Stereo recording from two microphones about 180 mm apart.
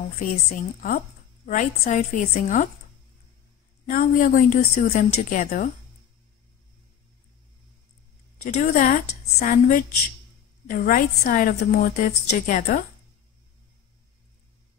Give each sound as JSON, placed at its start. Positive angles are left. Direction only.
{"t": 0.2, "sound": "a woman's voice", "side_deg": 50}
{"t": 3.9, "sound": "a woman's voice", "side_deg": 45}
{"t": 4.9, "sound": "a woman's voice", "side_deg": 40}
{"t": 8.5, "sound": "a woman's voice", "side_deg": 45}